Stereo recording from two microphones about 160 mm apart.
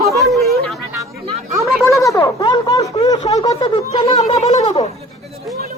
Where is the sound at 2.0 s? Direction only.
20° left (ahead or behind).